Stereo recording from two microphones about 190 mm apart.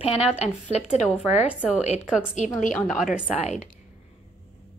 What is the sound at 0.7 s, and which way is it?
Speech, 35° left (ahead or behind).